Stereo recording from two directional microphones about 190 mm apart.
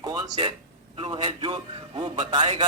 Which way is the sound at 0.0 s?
20° right (ahead or behind).